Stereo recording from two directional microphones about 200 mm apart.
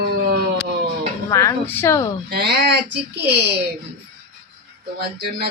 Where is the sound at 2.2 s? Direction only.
50° right (ahead or behind).